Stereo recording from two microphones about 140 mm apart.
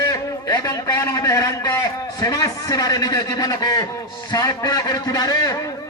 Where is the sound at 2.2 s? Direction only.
25° left (ahead or behind).